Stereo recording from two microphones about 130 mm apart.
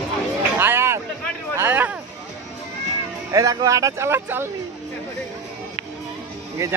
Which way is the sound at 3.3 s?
25° right (ahead or behind).